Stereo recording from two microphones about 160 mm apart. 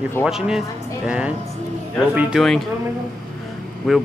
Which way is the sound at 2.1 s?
10° right (ahead or behind).